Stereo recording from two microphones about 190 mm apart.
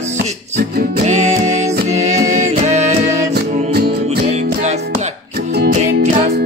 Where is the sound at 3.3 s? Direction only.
55° right (ahead or behind).